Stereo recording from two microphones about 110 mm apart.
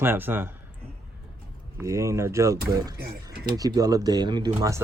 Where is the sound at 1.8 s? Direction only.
30° right (ahead or behind).